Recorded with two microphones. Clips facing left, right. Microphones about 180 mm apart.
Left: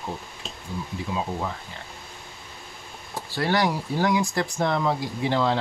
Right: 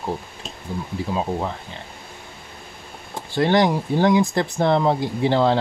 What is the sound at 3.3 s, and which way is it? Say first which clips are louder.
Speech: right 6 dB; 20° right (ahead or behind).